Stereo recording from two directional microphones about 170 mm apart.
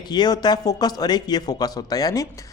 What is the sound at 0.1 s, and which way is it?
Speech, 25° left (ahead or behind).